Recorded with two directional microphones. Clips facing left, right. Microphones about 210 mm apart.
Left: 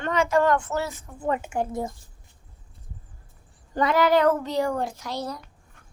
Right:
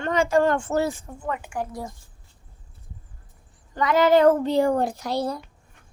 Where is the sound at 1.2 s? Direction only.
25° left (ahead or behind).